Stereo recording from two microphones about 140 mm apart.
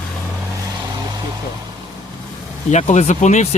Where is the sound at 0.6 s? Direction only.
25° right (ahead or behind).